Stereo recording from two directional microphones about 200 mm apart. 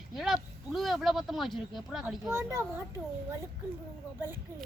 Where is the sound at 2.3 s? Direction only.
15° right (ahead or behind).